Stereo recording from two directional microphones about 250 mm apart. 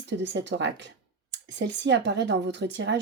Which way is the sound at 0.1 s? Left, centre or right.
Right.